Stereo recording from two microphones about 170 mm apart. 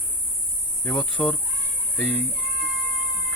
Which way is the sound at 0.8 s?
10° left (ahead or behind).